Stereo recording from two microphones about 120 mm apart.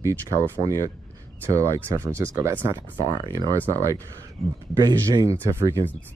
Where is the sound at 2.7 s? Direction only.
35° right (ahead or behind).